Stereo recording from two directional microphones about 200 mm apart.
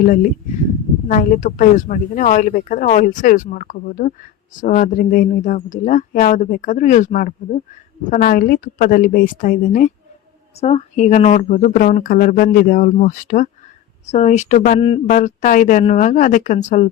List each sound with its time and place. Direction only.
0.0 s a woman's voice: 45° left (ahead or behind)